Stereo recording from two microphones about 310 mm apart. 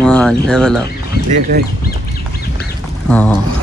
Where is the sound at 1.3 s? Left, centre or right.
Right.